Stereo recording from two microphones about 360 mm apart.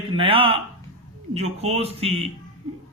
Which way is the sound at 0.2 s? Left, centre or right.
Centre.